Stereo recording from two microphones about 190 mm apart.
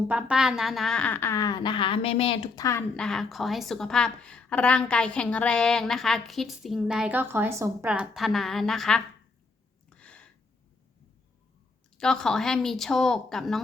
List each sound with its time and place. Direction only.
0.1 s a woman's voice: 5° right (ahead or behind); by 2.6 s 30° left (ahead or behind)
2.6 s a woman's voice: 10° left (ahead or behind)
9.9 s a sound: 5° left (ahead or behind)
11.9 s a woman's voice: 5° left (ahead or behind)